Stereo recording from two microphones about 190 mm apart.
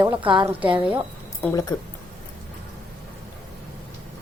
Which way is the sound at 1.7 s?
25° left (ahead or behind).